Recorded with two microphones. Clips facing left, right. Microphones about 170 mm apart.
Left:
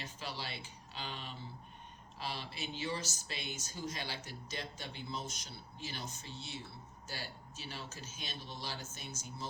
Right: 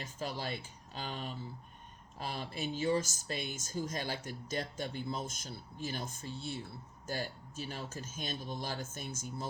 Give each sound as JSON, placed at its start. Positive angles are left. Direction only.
{"t": 0.0, "sound": "speech", "side_deg": -45}